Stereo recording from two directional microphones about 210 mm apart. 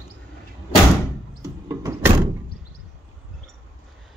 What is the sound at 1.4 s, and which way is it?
Sliding door, 15° right (ahead or behind).